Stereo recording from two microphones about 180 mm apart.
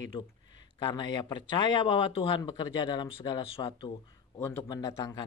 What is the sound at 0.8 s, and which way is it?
Speech, 25° left (ahead or behind).